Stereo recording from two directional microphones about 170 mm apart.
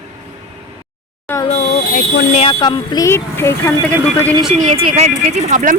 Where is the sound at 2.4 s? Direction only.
35° left (ahead or behind); by 3.9 s 15° left (ahead or behind).